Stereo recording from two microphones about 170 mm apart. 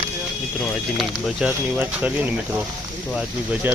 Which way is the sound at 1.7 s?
10° right (ahead or behind).